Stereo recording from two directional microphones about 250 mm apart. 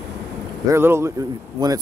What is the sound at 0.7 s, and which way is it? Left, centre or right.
Speech, centre.